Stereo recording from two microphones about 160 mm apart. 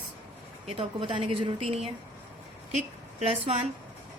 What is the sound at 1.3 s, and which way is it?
A woman's voice, 35° right (ahead or behind).